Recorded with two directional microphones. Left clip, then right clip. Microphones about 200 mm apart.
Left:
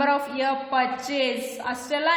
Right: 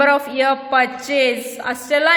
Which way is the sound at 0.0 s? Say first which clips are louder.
Right 8 dB; 30° right (ahead or behind).